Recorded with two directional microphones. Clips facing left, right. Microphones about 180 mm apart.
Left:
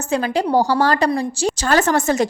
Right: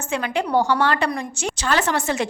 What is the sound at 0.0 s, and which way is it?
A woman's voice, 35° left (ahead or behind).